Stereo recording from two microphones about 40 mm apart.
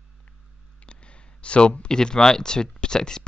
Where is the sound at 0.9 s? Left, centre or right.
Left.